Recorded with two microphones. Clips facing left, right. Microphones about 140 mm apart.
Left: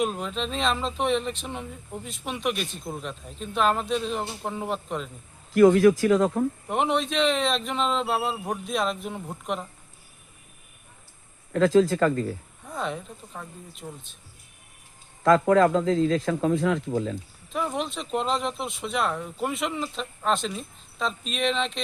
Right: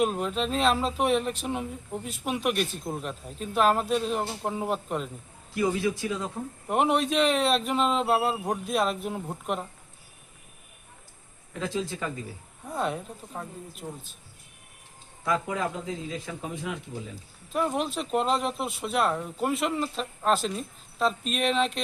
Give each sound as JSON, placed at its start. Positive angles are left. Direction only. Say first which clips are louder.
{"t": 0.0, "sound": "speech", "louder": "right 1 dB", "side_deg": -5}
{"t": 5.5, "sound": "a man's voice", "louder": "left 10 dB", "side_deg": 90}
{"t": 6.7, "sound": "speech", "louder": "right 1 dB", "side_deg": -5}
{"t": 11.5, "sound": "a man's voice", "louder": "left 12 dB", "side_deg": 90}
{"t": 12.6, "sound": "speech", "louder": "right 2 dB", "side_deg": -10}
{"t": 15.2, "sound": "a man's voice", "louder": "left 10 dB", "side_deg": 90}
{"t": 17.5, "sound": "speech", "louder": "right 1 dB", "side_deg": -5}